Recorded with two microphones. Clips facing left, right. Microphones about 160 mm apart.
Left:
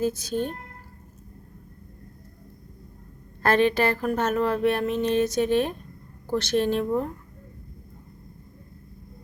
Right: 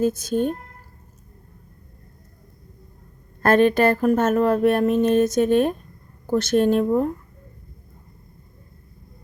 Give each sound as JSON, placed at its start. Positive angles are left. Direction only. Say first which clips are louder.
{"t": 0.0, "sound": "a woman's voice", "louder": "right 5 dB", "side_deg": -50}
{"t": 3.4, "sound": "a woman's voice", "louder": "right 5 dB", "side_deg": -50}